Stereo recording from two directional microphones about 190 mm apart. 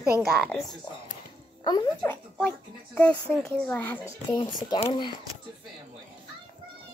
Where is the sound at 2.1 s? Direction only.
10° left (ahead or behind).